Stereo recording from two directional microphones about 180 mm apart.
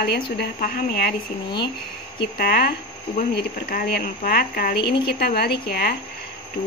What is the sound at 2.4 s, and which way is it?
Speech, 55° left (ahead or behind).